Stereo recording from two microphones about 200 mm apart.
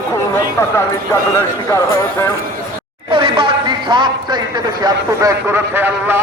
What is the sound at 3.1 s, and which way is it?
A man's voice, 25° right (ahead or behind).